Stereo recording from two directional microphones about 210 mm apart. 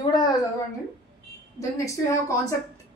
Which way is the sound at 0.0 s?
20° left (ahead or behind).